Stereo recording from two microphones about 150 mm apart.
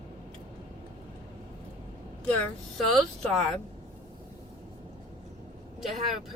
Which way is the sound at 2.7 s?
5° left (ahead or behind).